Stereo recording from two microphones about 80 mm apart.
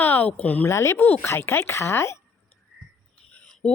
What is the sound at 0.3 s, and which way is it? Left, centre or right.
Speech, left.